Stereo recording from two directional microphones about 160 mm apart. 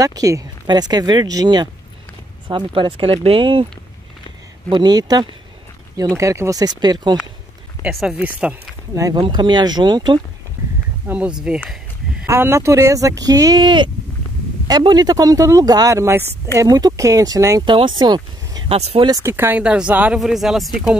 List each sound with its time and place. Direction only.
0.0 s speech: 20° right (ahead or behind)
4.6 s speech: 25° right (ahead or behind)
7.8 s speech: 5° right (ahead or behind)
8.9 s speech: 20° right (ahead or behind)
11.1 s speech: 5° right (ahead or behind)
12.3 s speech: 15° right (ahead or behind)
17.6 s speech: 30° right (ahead or behind)
18.8 s speech: 40° right (ahead or behind)
19.0 s speech: 20° right (ahead or behind); by 21.0 s centre (ahead or behind)